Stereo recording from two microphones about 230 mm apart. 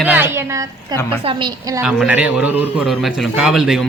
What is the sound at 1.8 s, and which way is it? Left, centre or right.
Speech, centre.